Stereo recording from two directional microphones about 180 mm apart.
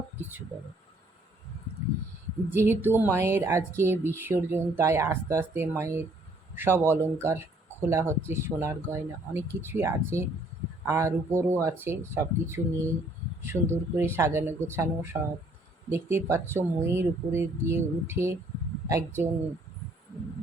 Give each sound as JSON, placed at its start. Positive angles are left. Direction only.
{"t": 2.5, "sound": "a woman's voice", "side_deg": -10}